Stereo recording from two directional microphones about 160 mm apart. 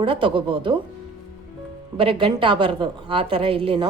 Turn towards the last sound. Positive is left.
turn(degrees=-35)  # may be behind; listen again after turning